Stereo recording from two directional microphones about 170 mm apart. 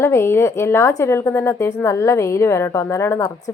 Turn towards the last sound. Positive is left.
turn(degrees=20)  # may be behind; listen again after turning